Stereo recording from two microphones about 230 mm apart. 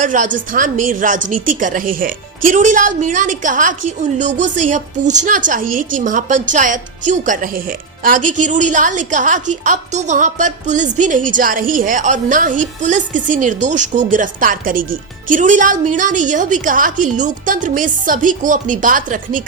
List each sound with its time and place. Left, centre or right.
0.0 s a woman's voice: right